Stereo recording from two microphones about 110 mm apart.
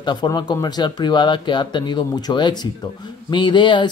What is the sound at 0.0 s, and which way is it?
Speech, 45° left (ahead or behind).